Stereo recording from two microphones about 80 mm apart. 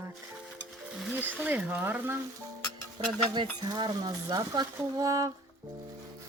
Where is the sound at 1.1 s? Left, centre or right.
Centre.